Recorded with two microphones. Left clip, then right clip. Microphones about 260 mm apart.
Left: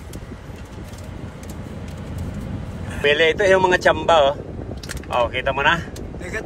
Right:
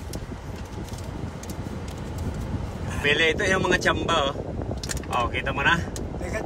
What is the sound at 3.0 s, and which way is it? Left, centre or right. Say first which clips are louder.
Speech: left 6 dB; centre.